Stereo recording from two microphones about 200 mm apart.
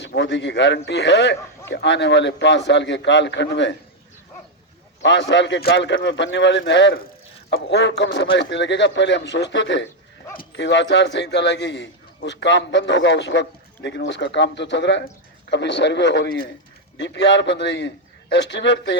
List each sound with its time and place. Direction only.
0.2 s a man's voice: 60° left (ahead or behind)
5.0 s a man's voice: 60° left (ahead or behind)